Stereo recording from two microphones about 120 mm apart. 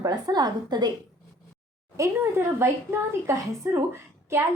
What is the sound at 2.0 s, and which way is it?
A woman's voice, 20° right (ahead or behind).